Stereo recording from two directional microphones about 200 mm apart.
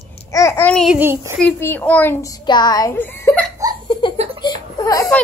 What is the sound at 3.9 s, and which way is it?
Laughter, 25° left (ahead or behind).